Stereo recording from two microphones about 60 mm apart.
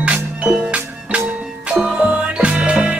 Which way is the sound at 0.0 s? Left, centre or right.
Right.